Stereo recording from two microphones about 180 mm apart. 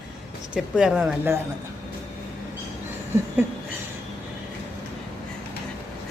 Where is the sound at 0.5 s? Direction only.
5° right (ahead or behind).